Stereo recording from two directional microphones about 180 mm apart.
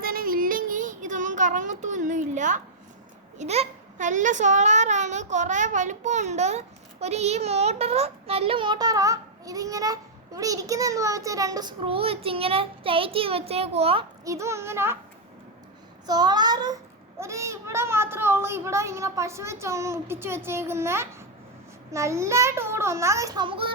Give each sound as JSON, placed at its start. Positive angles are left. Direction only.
{"t": 0.0, "sound": "child singing", "side_deg": -55}
{"t": 3.3, "sound": "a child's voice", "side_deg": -35}
{"t": 14.3, "sound": "a child's voice", "side_deg": -15}
{"t": 16.0, "sound": "a child's voice", "side_deg": -20}